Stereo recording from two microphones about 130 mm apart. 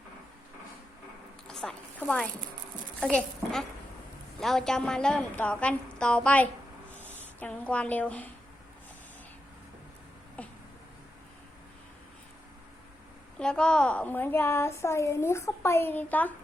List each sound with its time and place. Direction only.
1.5 s zipper: 5° left (ahead or behind)
3.0 s a woman's voice: 5° left (ahead or behind)
10.4 s a sound: 10° left (ahead or behind)
13.4 s a woman's voice: 5° left (ahead or behind)